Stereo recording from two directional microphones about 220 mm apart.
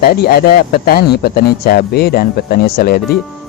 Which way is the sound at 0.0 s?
45° left (ahead or behind).